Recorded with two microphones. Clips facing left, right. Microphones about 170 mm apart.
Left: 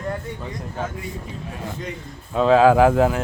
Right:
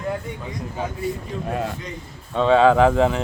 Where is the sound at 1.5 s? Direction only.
65° right (ahead or behind).